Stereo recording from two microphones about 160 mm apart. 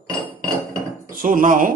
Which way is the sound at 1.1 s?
60° right (ahead or behind).